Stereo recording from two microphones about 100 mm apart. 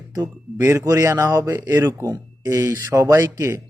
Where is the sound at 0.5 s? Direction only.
25° right (ahead or behind).